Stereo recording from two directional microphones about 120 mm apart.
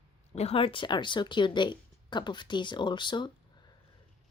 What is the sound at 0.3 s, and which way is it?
A woman's voice, 55° left (ahead or behind).